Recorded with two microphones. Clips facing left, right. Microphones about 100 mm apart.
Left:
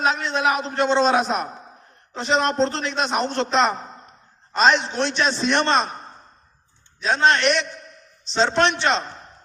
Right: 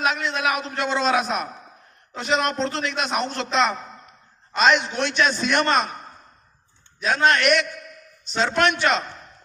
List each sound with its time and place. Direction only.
0.0 s a man's voice: 30° left (ahead or behind)